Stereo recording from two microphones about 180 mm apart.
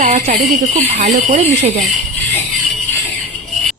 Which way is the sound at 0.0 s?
35° right (ahead or behind).